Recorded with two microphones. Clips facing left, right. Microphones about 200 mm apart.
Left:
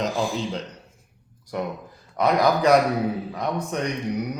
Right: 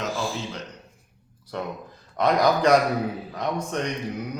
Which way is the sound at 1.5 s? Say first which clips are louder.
Left 3 dB; 10° left (ahead or behind).